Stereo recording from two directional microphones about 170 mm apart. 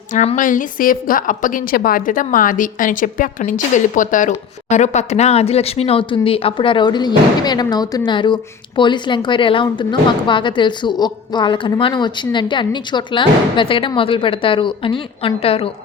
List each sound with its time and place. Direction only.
0.1 s a woman's voice: 45° left (ahead or behind)